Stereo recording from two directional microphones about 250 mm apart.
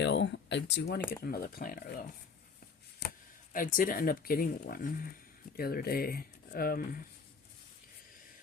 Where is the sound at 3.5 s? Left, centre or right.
Left.